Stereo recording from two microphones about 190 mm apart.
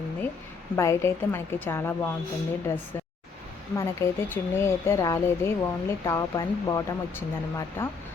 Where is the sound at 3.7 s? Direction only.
15° left (ahead or behind).